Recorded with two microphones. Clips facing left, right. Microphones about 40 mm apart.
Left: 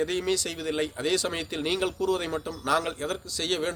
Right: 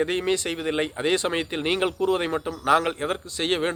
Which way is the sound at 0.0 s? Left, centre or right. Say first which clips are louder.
Right 3 dB; right.